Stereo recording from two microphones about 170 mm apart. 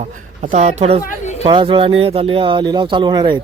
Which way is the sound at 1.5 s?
30° right (ahead or behind).